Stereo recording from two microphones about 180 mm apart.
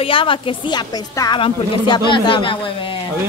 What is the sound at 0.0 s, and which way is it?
A woman's voice, 30° left (ahead or behind).